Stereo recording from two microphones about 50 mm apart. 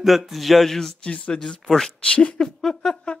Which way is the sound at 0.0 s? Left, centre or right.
Centre.